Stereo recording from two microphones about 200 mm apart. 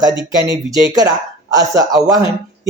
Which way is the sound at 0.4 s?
20° right (ahead or behind).